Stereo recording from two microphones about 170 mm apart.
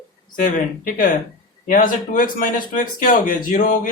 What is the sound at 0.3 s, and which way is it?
Speech, 55° left (ahead or behind).